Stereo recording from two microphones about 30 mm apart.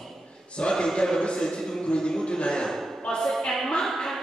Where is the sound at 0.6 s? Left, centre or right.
Left.